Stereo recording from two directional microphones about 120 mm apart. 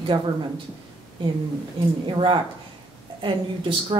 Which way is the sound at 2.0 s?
40° right (ahead or behind).